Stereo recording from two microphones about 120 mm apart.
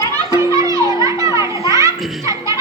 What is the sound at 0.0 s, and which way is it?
Children playing, 30° right (ahead or behind).